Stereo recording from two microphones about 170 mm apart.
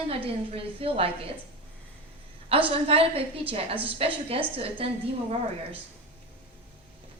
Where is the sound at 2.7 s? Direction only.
35° right (ahead or behind).